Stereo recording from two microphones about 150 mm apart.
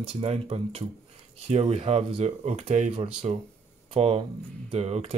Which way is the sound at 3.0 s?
40° right (ahead or behind).